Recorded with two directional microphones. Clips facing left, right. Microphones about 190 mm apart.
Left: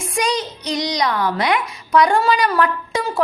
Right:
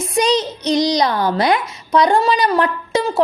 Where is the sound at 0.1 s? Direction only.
25° right (ahead or behind).